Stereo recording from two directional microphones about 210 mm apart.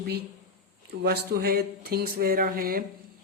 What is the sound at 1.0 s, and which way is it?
Speech, 50° right (ahead or behind).